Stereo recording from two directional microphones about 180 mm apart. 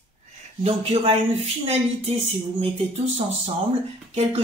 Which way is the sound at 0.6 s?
35° right (ahead or behind).